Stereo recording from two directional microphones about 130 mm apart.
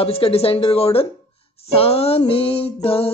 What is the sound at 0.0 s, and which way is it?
Speech, 50° left (ahead or behind).